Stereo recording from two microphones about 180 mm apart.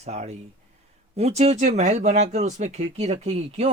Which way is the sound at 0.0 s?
40° right (ahead or behind).